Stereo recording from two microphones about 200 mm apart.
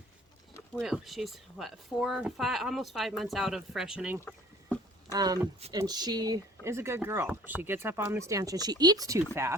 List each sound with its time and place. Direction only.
0.8 s speech: centre (ahead or behind)
4.3 s a sound: 10° left (ahead or behind)
5.1 s speech: 20° right (ahead or behind)